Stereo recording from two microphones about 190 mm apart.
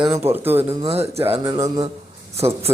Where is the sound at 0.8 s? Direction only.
30° right (ahead or behind).